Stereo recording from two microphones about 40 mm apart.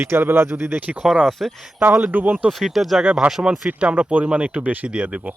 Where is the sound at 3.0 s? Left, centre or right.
Right.